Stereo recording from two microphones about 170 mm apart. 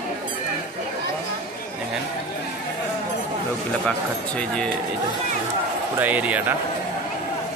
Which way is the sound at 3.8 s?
5° left (ahead or behind).